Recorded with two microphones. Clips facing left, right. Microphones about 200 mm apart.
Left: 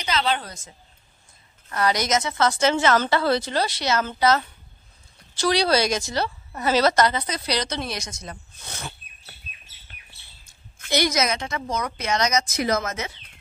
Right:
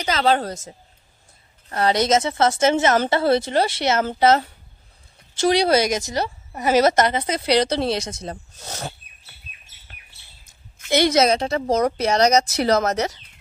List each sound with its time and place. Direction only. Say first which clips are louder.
0.0 s a woman's voice: right 5 dB; 45° right (ahead or behind)
1.7 s a woman's voice: right 4 dB; 30° right (ahead or behind)
5.4 s a woman's voice: right 3 dB; 20° right (ahead or behind); by 8.9 s 40° right (ahead or behind)
11.1 s speech: right 7 dB; 30° right (ahead or behind)